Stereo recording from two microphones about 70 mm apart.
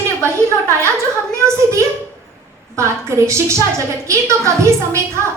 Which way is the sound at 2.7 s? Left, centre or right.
Right.